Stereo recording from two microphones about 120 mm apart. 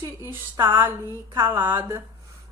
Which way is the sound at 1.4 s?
20° right (ahead or behind).